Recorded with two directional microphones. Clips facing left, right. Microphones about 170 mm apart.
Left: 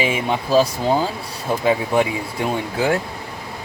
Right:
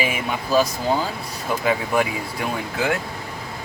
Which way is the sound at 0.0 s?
25° left (ahead or behind).